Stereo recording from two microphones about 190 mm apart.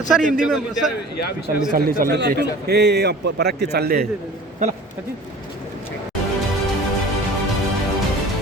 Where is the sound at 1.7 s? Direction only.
55° right (ahead or behind).